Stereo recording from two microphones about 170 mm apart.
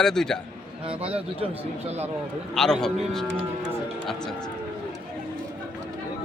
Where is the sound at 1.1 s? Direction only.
35° right (ahead or behind).